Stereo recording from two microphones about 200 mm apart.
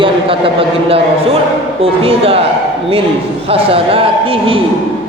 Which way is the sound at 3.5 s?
30° right (ahead or behind).